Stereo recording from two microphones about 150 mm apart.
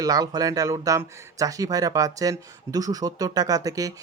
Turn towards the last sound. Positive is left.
turn(degrees=-25)  # may be behind; listen again after turning